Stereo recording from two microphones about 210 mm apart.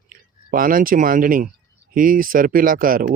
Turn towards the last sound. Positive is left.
turn(degrees=-40)  # may be behind; listen again after turning